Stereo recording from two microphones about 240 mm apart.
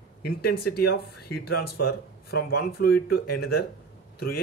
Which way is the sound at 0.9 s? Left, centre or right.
Left.